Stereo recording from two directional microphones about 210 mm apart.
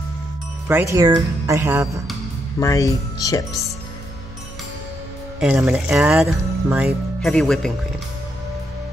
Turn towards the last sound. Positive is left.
turn(degrees=0)  # may be behind; listen again after turning